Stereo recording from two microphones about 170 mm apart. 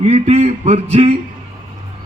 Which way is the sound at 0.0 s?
40° right (ahead or behind).